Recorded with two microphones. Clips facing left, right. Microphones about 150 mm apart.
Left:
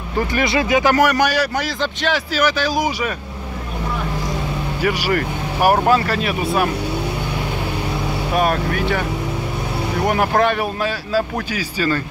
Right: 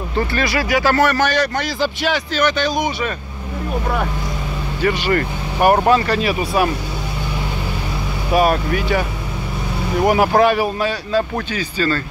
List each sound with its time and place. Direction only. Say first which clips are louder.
0.3 s speech: left 4 dB; 20° left (ahead or behind)
4.8 s speech: right 2 dB; 5° left (ahead or behind)
8.4 s speech: right 3 dB; centre (ahead or behind)
10.0 s speech: right 4 dB; 5° right (ahead or behind)